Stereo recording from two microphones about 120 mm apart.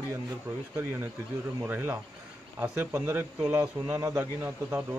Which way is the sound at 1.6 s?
20° right (ahead or behind).